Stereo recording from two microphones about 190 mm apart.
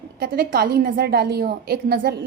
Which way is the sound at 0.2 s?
50° right (ahead or behind).